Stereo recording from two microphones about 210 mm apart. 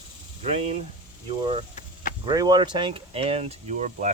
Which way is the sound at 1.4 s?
25° right (ahead or behind).